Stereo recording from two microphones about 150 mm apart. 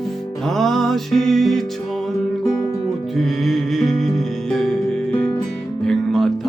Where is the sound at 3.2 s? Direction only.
Centre (ahead or behind).